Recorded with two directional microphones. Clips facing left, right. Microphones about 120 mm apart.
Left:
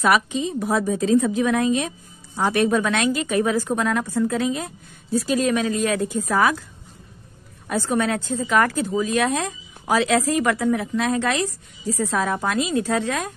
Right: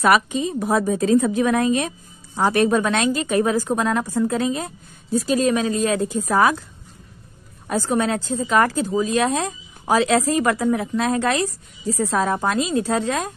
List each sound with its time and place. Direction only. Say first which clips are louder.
0.0 s a woman's voice: right 2 dB; 55° right (ahead or behind)
7.9 s speech: right 1 dB; 30° right (ahead or behind)